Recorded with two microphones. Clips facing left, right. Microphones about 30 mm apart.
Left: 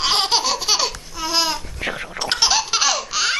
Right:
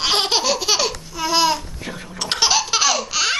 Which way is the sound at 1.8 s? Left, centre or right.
Left.